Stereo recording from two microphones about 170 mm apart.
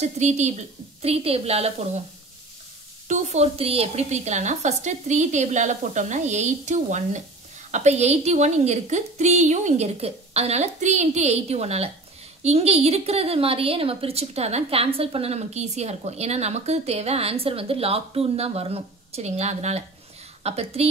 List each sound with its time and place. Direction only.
0.0 s a woman's voice: 40° right (ahead or behind)
3.1 s a woman's voice: 45° right (ahead or behind)